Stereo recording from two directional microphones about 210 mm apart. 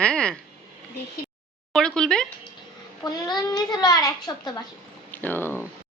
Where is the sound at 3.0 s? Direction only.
20° left (ahead or behind).